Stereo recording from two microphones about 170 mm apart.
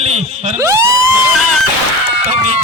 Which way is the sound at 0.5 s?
20° right (ahead or behind).